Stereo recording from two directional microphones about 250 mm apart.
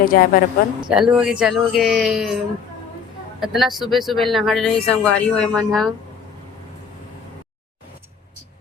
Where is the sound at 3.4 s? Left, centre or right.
Centre.